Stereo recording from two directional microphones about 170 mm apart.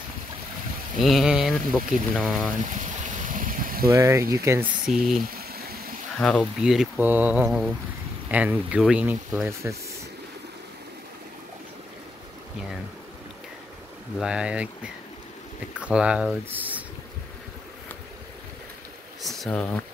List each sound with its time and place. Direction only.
1.0 s speech: centre (ahead or behind)
2.6 s a sound: 45° right (ahead or behind)
3.8 s speech: 20° right (ahead or behind)
4.8 s speech: centre (ahead or behind)
5.4 s a sound: 65° right (ahead or behind)
6.1 s speech: 5° left (ahead or behind); by 9.8 s 15° right (ahead or behind)
14.1 s speech: 5° right (ahead or behind)
15.8 s speech: 5° right (ahead or behind)
19.2 s a sound: centre (ahead or behind)